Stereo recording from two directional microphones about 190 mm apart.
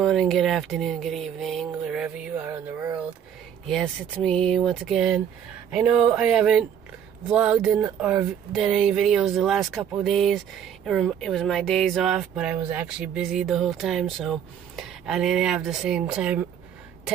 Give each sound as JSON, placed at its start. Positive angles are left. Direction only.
{"t": 0.0, "sound": "speech", "side_deg": 0}
{"t": 1.9, "sound": "a sound", "side_deg": -5}
{"t": 3.6, "sound": "speech", "side_deg": 0}